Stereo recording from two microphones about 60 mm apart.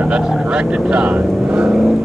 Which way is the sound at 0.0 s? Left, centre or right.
Centre.